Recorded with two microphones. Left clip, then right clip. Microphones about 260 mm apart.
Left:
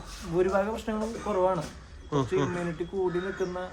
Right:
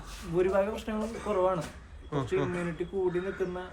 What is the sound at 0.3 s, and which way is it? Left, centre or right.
A man's voice, centre.